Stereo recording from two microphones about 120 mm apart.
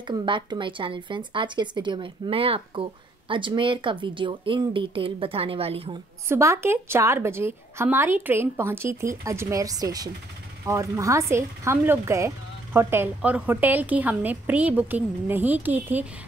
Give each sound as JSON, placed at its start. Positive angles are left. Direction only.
{"t": 0.0, "sound": "a woman's voice", "side_deg": -40}
{"t": 6.2, "sound": "a woman's voice", "side_deg": -25}